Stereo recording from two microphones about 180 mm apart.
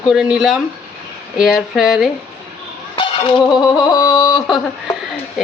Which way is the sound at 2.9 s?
25° left (ahead or behind).